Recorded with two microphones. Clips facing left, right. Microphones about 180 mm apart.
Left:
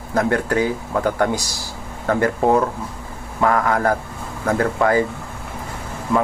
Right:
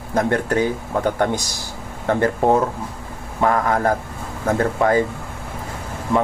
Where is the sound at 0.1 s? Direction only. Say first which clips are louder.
Even; 25° right (ahead or behind).